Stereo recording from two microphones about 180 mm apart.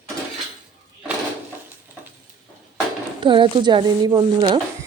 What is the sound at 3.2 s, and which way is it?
Speech, 25° right (ahead or behind).